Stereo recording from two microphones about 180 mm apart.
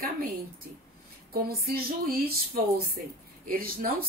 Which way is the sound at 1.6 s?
55° right (ahead or behind).